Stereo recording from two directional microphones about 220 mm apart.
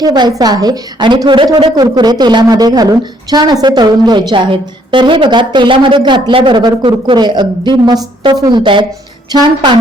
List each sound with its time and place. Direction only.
0.0 s a woman's voice: 20° right (ahead or behind)